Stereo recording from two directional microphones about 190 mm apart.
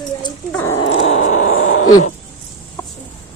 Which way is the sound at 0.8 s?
85° left.